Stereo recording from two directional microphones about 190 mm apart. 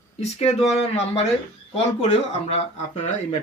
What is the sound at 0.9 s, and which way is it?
Speech, 35° left (ahead or behind).